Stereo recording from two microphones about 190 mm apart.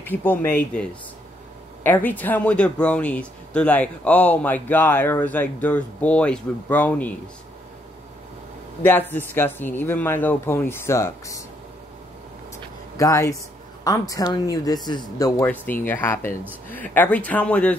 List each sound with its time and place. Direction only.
0.0 s speech: 10° left (ahead or behind)
8.8 s speech: 10° left (ahead or behind)
12.9 s a woman's voice: 15° left (ahead or behind)